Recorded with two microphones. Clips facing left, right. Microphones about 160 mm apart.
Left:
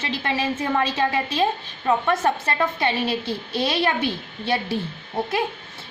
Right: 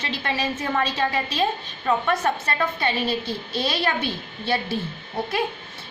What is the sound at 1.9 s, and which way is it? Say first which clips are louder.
Speech: left 2 dB; 25° left (ahead or behind).